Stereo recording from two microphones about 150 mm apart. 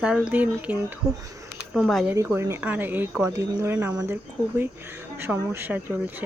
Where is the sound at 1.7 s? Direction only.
Centre (ahead or behind).